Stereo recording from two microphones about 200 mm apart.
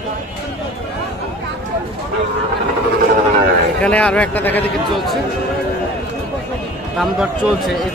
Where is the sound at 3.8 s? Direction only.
5° left (ahead or behind).